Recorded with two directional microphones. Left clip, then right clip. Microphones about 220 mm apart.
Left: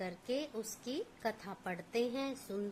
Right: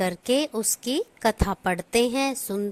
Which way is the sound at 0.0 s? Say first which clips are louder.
Right 15 dB; 45° right (ahead or behind).